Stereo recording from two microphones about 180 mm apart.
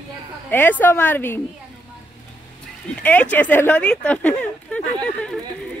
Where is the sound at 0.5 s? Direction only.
10° left (ahead or behind).